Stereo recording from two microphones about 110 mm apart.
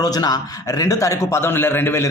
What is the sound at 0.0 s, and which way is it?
Speech, 35° left (ahead or behind).